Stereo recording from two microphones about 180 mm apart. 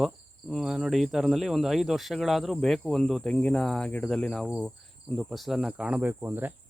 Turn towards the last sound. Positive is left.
turn(degrees=-10)  # may be behind; listen again after turning